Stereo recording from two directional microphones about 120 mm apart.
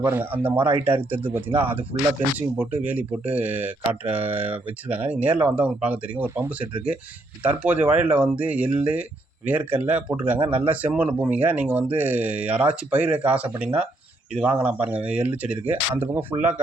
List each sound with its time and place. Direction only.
0.0 s speech: 15° right (ahead or behind)
2.6 s speech: 15° right (ahead or behind)